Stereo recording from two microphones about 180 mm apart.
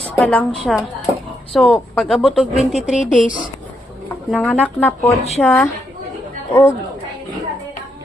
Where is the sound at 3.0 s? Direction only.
45° left (ahead or behind).